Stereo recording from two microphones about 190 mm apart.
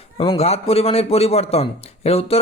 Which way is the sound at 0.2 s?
30° left (ahead or behind).